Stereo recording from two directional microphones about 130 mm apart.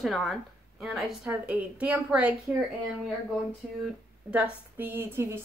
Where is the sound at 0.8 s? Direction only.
Centre (ahead or behind).